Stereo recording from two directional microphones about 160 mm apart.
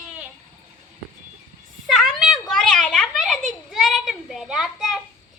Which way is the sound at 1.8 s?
Centre (ahead or behind).